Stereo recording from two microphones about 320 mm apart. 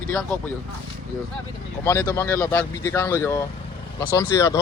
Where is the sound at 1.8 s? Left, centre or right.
Centre.